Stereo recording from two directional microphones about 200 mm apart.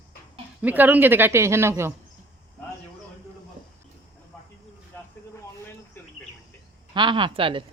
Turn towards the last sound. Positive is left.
turn(degrees=-25)  # may be behind; listen again after turning